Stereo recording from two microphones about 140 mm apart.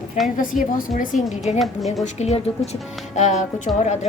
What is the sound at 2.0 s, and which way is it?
A woman's voice, 50° left (ahead or behind).